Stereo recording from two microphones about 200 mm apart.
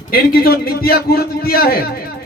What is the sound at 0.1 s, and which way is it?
A man's voice, 50° left (ahead or behind).